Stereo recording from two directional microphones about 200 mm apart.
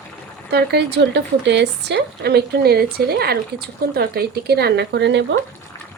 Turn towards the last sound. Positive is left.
turn(degrees=-60)  # may be behind; listen again after turning